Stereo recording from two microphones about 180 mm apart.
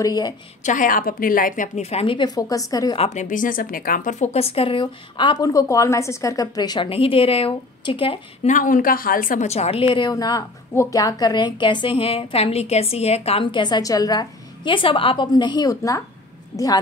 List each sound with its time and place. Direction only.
0.0 s a woman's voice: 20° left (ahead or behind)
0.7 s speech: 50° left (ahead or behind); by 3.0 s 20° left (ahead or behind)
3.0 s speech: 40° left (ahead or behind)
8.5 s a woman's voice: 45° left (ahead or behind); by 16.8 s 20° left (ahead or behind)